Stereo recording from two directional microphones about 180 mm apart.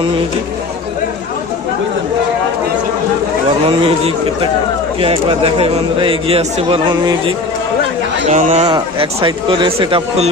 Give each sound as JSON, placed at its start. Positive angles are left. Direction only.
{"t": 3.7, "sound": "speech", "side_deg": -30}
{"t": 8.3, "sound": "speech", "side_deg": -40}
{"t": 8.7, "sound": "speech", "side_deg": -30}